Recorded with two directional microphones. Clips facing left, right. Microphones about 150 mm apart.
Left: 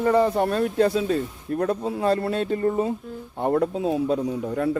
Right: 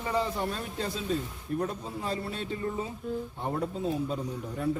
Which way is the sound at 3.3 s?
65° left (ahead or behind).